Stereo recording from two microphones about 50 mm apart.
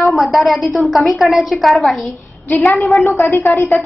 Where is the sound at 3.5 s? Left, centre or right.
Left.